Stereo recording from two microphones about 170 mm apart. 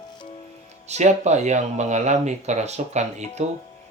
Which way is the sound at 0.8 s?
40° right (ahead or behind).